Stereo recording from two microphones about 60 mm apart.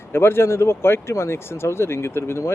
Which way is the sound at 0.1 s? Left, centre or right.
Left.